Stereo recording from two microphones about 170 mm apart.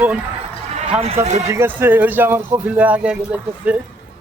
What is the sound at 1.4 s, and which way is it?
Speech, 15° right (ahead or behind).